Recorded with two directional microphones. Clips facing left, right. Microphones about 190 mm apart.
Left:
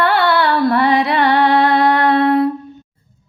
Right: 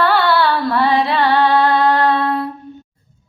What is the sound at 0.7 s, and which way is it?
Music, 65° left (ahead or behind).